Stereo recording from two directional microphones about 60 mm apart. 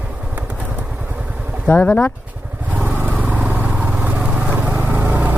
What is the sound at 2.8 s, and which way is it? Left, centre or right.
Vehicle, right.